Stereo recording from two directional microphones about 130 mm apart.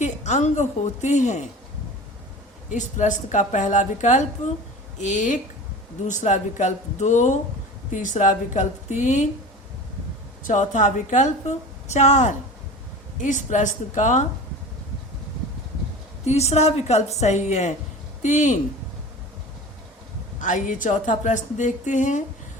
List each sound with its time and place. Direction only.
0.0 s a woman's voice: 65° left (ahead or behind)
2.6 s a woman's voice: 75° left (ahead or behind)
10.4 s a woman's voice: 75° left (ahead or behind)
13.2 s a woman's voice: 75° left (ahead or behind)
16.2 s a woman's voice: 55° left (ahead or behind)
20.4 s a woman's voice: 85° left; by 22.2 s 70° left (ahead or behind)